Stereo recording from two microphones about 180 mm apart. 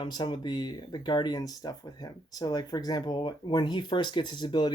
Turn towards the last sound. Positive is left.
turn(degrees=25)  # may be behind; listen again after turning